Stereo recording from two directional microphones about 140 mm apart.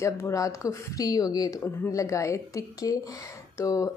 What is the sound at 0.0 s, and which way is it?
A woman's voice, 20° left (ahead or behind).